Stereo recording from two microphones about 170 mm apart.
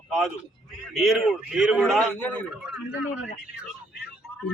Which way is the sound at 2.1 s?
10° left (ahead or behind).